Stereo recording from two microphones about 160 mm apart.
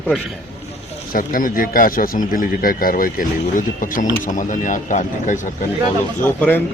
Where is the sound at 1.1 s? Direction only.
60° left (ahead or behind).